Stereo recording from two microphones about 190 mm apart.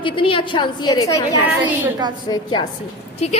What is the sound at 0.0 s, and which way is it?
A woman's voice, 25° left (ahead or behind).